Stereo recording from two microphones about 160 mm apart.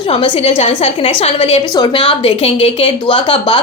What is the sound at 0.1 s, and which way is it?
A woman's voice, 35° left (ahead or behind).